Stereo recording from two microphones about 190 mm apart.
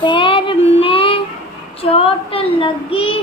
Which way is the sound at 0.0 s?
25° left (ahead or behind).